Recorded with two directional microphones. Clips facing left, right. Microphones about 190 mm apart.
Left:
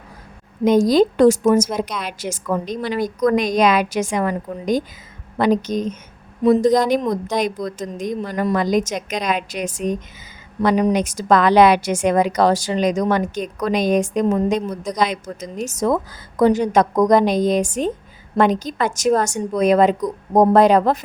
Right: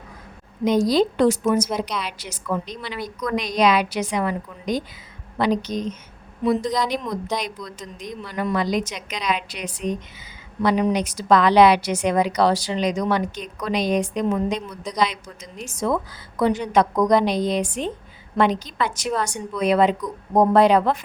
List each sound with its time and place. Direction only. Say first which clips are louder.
0.6 s a woman's voice: left 4 dB; 50° left (ahead or behind)